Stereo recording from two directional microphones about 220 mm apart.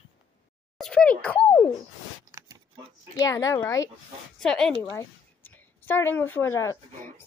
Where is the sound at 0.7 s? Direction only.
5° left (ahead or behind).